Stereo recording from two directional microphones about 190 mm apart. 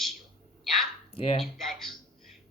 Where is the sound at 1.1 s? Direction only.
30° left (ahead or behind).